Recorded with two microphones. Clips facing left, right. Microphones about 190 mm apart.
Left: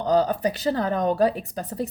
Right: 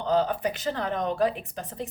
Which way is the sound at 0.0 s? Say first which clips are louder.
Left 4 dB; 40° left (ahead or behind).